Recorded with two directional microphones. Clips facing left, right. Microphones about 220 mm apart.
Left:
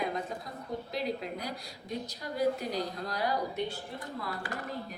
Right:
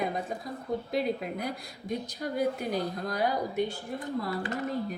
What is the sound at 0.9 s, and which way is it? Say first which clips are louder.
A woman's voice: right 4 dB; 55° right (ahead or behind).